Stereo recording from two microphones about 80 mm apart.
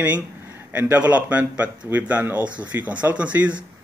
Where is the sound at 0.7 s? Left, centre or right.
Centre.